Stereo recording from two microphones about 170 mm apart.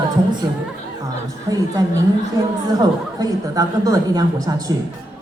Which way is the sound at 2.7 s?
20° right (ahead or behind).